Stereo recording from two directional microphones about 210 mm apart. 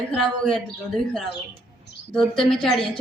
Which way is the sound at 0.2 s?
Centre (ahead or behind).